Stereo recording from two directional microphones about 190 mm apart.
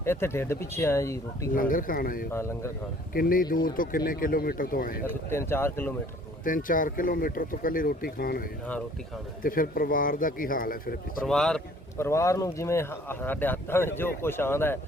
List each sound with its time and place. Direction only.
0.0 s speech: 10° left (ahead or behind)
1.5 s speech: 45° left (ahead or behind)
2.3 s speech: 15° left (ahead or behind)
3.1 s speech: 50° left (ahead or behind)
5.0 s speech: 10° left (ahead or behind)
6.4 s speech: 45° left (ahead or behind)
11.3 s speech: 5° left (ahead or behind)
11.9 s speech: 15° left (ahead or behind)